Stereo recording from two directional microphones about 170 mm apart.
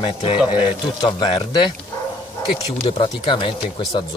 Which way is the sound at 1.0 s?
25° left (ahead or behind).